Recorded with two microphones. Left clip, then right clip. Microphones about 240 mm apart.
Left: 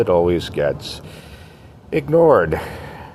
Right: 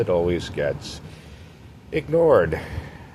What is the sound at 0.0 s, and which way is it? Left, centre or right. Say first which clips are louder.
Speech: left 6 dB; left.